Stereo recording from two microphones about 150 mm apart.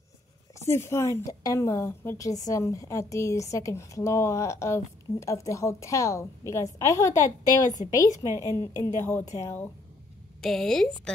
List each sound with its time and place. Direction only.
0.6 s a woman's voice: 20° left (ahead or behind)
8.2 s a woman's voice: 20° right (ahead or behind)
8.5 s speech: 20° left (ahead or behind)
10.4 s a woman's voice: centre (ahead or behind)